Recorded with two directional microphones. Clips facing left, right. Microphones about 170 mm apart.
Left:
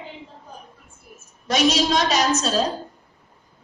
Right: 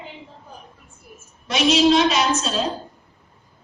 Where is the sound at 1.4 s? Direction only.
40° left (ahead or behind).